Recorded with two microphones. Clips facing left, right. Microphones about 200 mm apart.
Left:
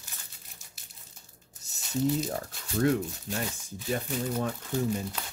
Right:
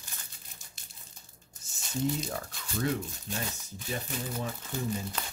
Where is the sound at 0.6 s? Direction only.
5° left (ahead or behind).